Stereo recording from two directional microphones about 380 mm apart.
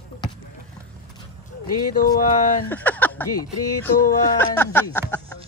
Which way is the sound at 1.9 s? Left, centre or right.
Left.